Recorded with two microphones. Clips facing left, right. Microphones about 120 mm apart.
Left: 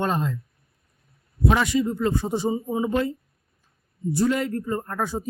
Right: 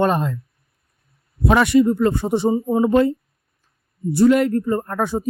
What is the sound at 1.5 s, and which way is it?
A man's voice, 65° right (ahead or behind).